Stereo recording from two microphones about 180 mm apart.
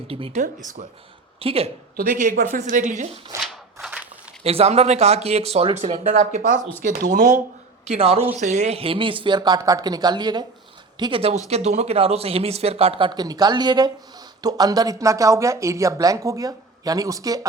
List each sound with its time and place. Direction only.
0.1 s speech: 30° right (ahead or behind)
0.8 s a woman's voice: 45° right (ahead or behind)
1.4 s speech: 30° right (ahead or behind)
2.0 s a woman's voice: 50° right (ahead or behind)
3.4 s a sound: 5° right (ahead or behind)
4.4 s a woman's voice: 35° right (ahead or behind)
7.9 s speech: 35° right (ahead or behind); by 17.4 s 20° right (ahead or behind)